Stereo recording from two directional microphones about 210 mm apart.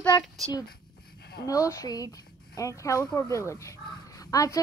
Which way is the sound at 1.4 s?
15° left (ahead or behind).